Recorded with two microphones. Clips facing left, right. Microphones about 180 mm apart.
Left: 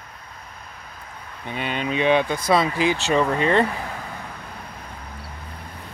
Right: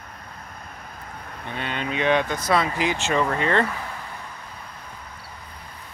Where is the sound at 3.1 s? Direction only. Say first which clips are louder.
Left 2 dB; 20° left (ahead or behind).